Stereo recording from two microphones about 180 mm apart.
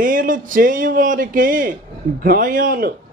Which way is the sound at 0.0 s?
50° right (ahead or behind).